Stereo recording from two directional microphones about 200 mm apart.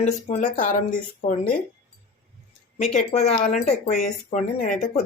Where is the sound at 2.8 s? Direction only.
35° left (ahead or behind).